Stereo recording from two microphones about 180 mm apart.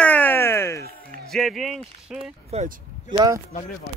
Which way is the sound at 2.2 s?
35° right (ahead or behind).